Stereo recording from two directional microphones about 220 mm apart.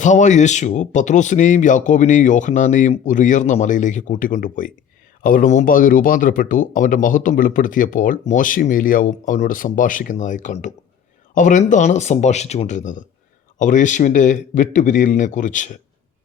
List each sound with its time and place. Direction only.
0.0 s speech: 35° left (ahead or behind)